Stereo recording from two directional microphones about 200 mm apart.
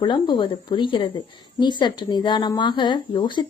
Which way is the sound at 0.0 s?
25° left (ahead or behind).